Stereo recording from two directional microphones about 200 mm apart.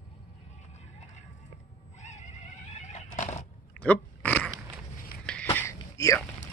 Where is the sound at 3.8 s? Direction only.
5° left (ahead or behind).